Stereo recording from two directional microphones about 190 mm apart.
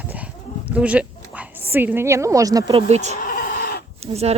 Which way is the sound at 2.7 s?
30° right (ahead or behind).